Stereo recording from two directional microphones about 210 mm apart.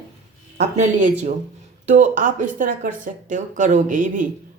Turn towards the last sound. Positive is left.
turn(degrees=-40)  # may be behind; listen again after turning